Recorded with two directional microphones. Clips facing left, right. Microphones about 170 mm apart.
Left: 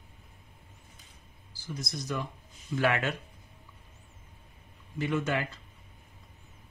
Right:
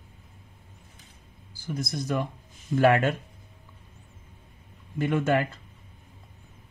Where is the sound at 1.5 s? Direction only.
55° right (ahead or behind).